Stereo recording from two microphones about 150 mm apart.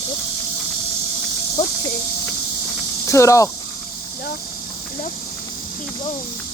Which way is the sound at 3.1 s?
20° left (ahead or behind).